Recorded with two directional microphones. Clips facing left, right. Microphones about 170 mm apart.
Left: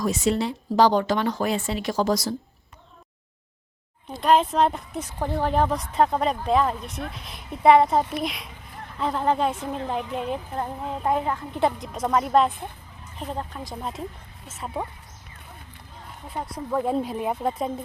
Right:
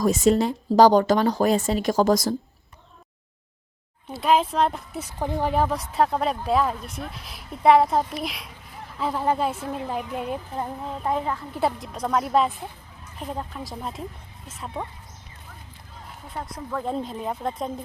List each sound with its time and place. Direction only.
0.0 s speech: 45° right (ahead or behind)
4.2 s speech: centre (ahead or behind)
5.0 s speech: 15° right (ahead or behind)
10.8 s speech: 10° left (ahead or behind)
11.5 s speech: centre (ahead or behind)
14.6 s speech: 10° left (ahead or behind)
16.3 s speech: 5° left (ahead or behind)